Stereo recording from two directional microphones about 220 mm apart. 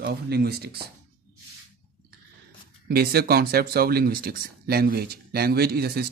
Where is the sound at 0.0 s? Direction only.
45° right (ahead or behind).